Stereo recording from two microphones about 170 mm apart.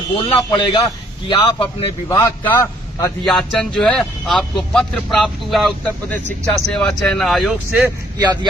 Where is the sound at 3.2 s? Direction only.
5° left (ahead or behind).